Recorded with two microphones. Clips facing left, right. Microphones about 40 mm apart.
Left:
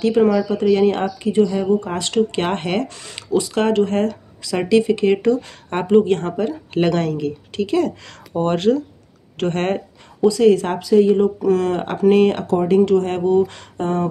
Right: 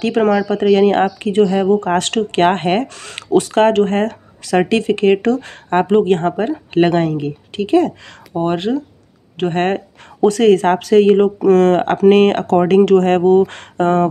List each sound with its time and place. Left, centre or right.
0.0 s speech: right
3.0 s speech: right
8.4 s speech: centre
10.2 s speech: right